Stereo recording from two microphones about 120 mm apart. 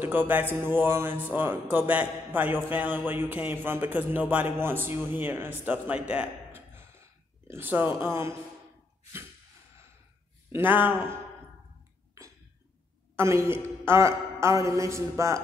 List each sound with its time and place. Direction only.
0.0 s a man's voice: 15° right (ahead or behind)
10.5 s speech: 15° right (ahead or behind)
12.2 s a sound: 25° right (ahead or behind)
13.1 s a woman's voice: 25° right (ahead or behind)